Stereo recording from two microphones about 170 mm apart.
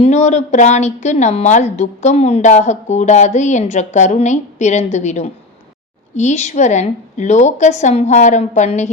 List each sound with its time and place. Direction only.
0.0 s a woman's voice: 40° left (ahead or behind)